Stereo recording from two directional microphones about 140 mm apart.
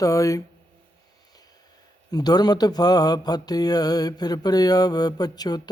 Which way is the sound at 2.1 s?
30° left (ahead or behind).